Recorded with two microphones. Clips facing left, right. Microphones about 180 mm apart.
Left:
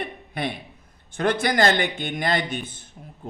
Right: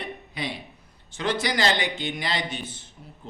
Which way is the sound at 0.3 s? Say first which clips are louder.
Left 5 dB; 55° left (ahead or behind).